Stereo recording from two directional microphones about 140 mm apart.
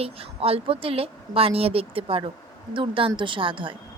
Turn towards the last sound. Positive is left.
turn(degrees=-35)  # may be behind; listen again after turning